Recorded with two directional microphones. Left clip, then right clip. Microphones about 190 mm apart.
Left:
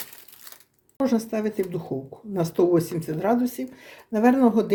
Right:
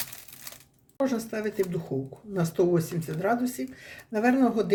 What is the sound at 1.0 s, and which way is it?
Speech, 30° left (ahead or behind).